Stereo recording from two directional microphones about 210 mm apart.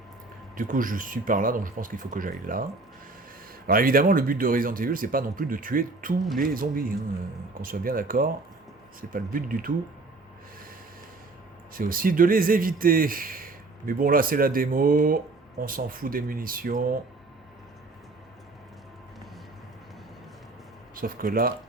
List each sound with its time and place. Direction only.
0.5 s speech: 40° right (ahead or behind)
3.7 s a man's voice: 45° right (ahead or behind)
11.7 s a man's voice: 40° right (ahead or behind)
20.9 s speech: 45° right (ahead or behind)